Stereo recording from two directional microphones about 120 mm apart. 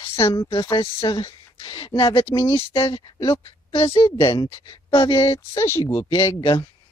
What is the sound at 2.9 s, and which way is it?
Speech, 35° left (ahead or behind).